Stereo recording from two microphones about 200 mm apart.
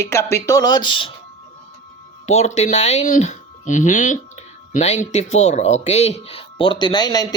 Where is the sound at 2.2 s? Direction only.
35° left (ahead or behind).